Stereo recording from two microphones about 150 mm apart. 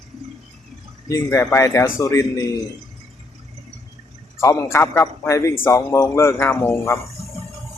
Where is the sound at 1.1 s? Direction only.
20° left (ahead or behind).